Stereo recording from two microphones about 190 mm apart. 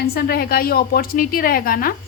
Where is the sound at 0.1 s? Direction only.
55° left (ahead or behind).